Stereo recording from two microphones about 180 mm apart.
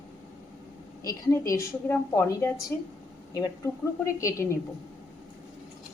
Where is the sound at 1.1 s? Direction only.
20° left (ahead or behind).